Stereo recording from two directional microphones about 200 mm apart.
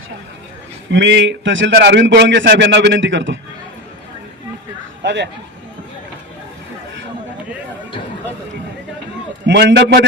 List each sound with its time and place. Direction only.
0.9 s a man's voice: 65° right (ahead or behind)
5.0 s a man's voice: 60° right (ahead or behind)
9.5 s a man's voice: 60° right (ahead or behind)